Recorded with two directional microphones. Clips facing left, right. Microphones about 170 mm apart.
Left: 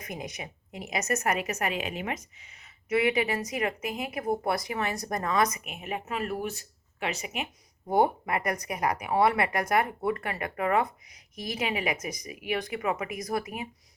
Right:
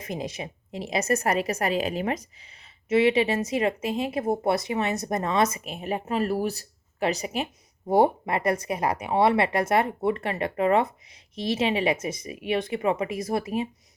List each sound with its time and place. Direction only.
0.0 s a woman's voice: 25° right (ahead or behind)